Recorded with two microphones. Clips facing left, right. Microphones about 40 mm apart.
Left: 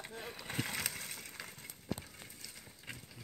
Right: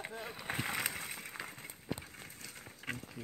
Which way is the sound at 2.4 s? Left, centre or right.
Right.